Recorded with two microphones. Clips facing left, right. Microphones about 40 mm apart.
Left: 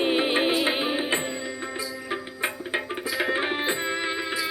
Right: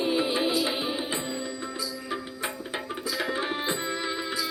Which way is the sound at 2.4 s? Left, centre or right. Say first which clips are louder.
Left 5 dB; left.